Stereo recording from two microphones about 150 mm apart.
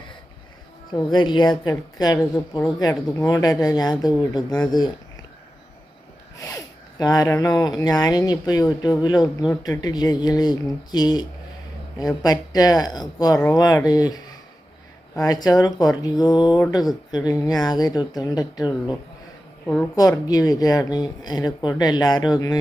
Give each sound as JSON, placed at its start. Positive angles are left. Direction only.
{"t": 0.9, "sound": "speech", "side_deg": 30}
{"t": 6.4, "sound": "speech", "side_deg": 25}
{"t": 19.6, "sound": "a woman's voice", "side_deg": 10}
{"t": 20.0, "sound": "speech", "side_deg": 25}